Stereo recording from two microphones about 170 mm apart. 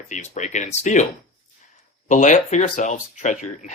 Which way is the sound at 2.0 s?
45° left (ahead or behind).